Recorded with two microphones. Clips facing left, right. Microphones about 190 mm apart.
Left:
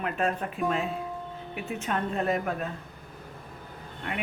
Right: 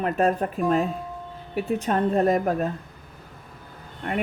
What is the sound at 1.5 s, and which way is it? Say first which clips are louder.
A woman's voice: right 8 dB; 40° right (ahead or behind).